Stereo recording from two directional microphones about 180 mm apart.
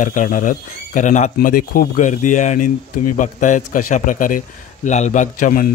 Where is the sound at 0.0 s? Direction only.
45° left (ahead or behind).